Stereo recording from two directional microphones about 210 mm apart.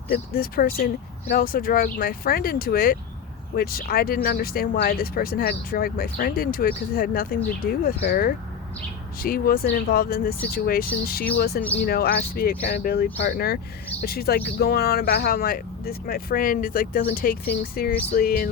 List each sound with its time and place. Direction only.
0.1 s speech: 45° left (ahead or behind)